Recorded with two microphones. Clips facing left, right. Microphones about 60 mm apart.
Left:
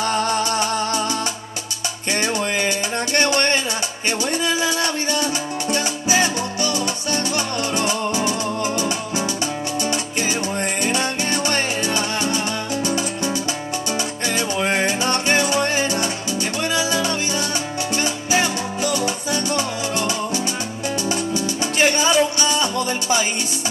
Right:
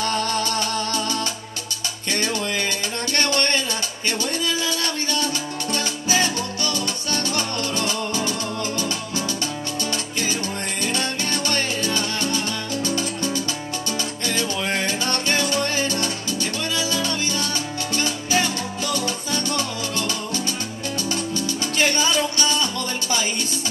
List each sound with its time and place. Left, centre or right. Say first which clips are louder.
0.0 s music: left 3 dB; left
2.1 s music: left 3 dB; centre
10.8 s music: left 1 dB; centre
14.6 s music: left 4 dB; left